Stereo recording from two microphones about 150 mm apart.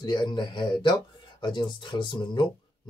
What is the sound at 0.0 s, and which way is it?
Speech, 30° left (ahead or behind).